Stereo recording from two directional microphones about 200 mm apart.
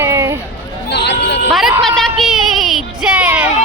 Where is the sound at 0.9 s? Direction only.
60° left (ahead or behind).